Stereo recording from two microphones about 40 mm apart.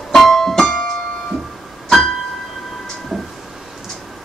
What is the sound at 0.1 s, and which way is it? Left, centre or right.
Music, centre.